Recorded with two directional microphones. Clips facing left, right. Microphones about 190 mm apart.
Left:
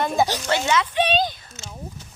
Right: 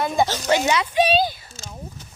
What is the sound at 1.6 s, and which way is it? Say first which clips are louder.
Speech: even; 35° right (ahead or behind).